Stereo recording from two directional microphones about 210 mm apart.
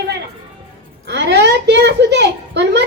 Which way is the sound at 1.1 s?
55° right (ahead or behind).